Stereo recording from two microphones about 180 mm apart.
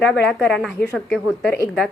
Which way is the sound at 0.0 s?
5° left (ahead or behind).